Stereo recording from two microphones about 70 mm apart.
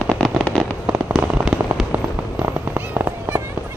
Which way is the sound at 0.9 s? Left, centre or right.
Centre.